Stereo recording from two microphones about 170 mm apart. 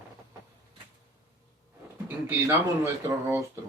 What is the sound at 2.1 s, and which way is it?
Speech, 10° right (ahead or behind).